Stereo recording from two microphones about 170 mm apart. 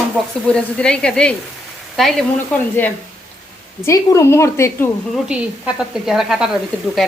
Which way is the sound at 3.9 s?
15° left (ahead or behind).